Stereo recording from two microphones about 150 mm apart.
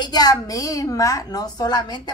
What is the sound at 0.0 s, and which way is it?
Speech, 25° left (ahead or behind).